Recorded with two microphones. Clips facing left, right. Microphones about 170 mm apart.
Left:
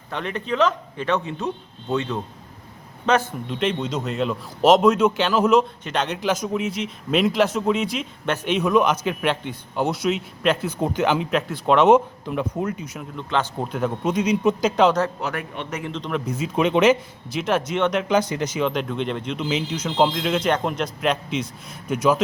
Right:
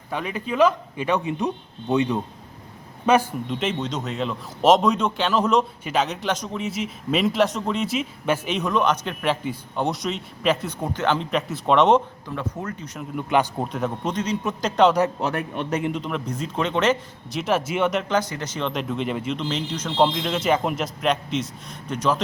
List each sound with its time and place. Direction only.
0.1 s a man's voice: 10° right (ahead or behind)
10.8 s speech: 10° left (ahead or behind)
13.1 s a man's voice: 10° right (ahead or behind)
13.7 s a man's voice: centre (ahead or behind)
15.2 s a man's voice: 30° right (ahead or behind)
15.8 s a man's voice: 10° right (ahead or behind)
16.6 s speech: 15° left (ahead or behind)
17.2 s a man's voice: centre (ahead or behind)
18.1 s speech: 15° left (ahead or behind)
18.7 s a man's voice: centre (ahead or behind)
19.4 s a man's voice: 5° left (ahead or behind)